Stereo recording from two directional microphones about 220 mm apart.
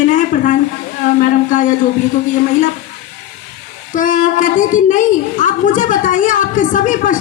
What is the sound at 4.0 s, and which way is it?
A woman's voice, 35° left (ahead or behind).